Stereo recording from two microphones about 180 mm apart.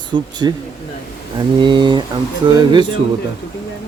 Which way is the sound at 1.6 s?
25° right (ahead or behind).